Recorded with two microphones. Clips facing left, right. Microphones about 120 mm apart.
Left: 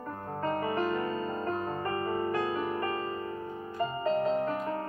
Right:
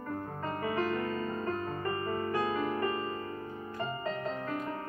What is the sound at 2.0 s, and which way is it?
Music, 20° left (ahead or behind).